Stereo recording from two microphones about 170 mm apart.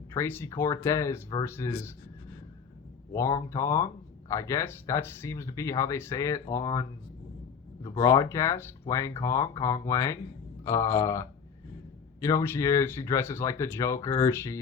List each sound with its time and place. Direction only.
0.1 s speech: 10° left (ahead or behind)
3.1 s speech: 20° left (ahead or behind)